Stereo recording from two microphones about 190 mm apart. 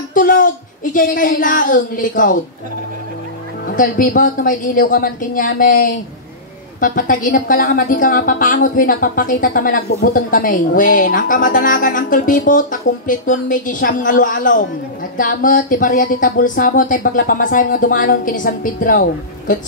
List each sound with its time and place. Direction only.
0.1 s speech: 45° left (ahead or behind)
3.6 s a woman's voice: 45° left (ahead or behind)